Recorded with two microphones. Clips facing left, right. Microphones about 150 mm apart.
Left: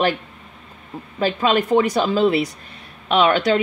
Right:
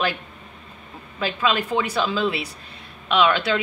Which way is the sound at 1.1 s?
45° left (ahead or behind).